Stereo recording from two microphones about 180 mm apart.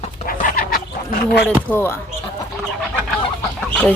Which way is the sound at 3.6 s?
10° left (ahead or behind).